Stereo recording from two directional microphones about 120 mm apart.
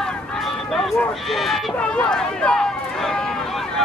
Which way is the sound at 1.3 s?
Centre (ahead or behind).